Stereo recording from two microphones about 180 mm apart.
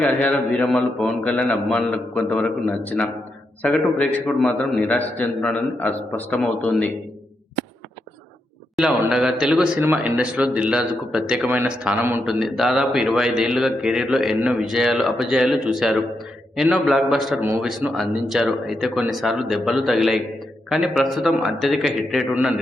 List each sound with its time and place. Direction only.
0.0 s a man's voice: 5° left (ahead or behind)
8.7 s speech: 5° right (ahead or behind)